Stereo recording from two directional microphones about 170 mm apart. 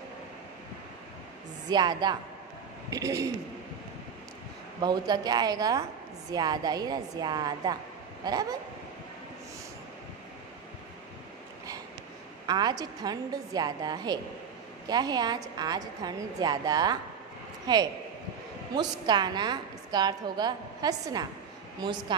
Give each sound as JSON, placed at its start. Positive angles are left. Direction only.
{"t": 1.7, "sound": "a woman's voice", "side_deg": -25}
{"t": 4.8, "sound": "a woman's voice", "side_deg": -25}
{"t": 12.4, "sound": "a woman's voice", "side_deg": -25}